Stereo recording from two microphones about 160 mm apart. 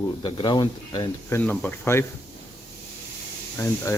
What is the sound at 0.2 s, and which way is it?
Speech, 30° left (ahead or behind).